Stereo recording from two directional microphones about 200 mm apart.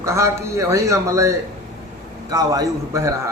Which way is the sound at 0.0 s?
15° right (ahead or behind).